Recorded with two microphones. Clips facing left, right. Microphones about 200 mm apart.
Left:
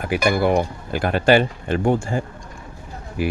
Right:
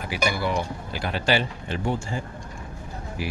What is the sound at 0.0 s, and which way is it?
Speech, 55° left (ahead or behind).